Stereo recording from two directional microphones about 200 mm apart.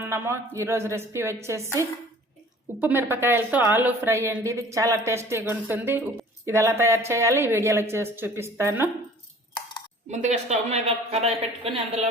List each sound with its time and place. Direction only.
0.0 s a woman's voice: 10° right (ahead or behind)
10.1 s speech: 35° right (ahead or behind)